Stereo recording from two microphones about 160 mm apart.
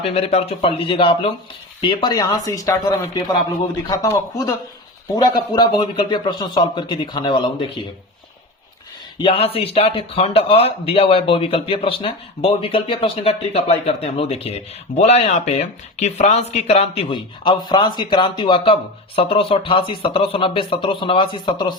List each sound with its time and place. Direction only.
0.0 s a man's voice: 40° left (ahead or behind); by 2.7 s 20° left (ahead or behind)
3.8 s a man's voice: 20° left (ahead or behind)
9.1 s speech: 35° left (ahead or behind)